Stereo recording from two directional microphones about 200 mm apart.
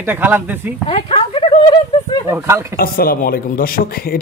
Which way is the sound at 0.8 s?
25° left (ahead or behind).